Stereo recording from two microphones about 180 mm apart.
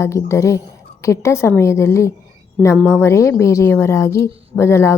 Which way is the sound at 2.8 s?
5° right (ahead or behind).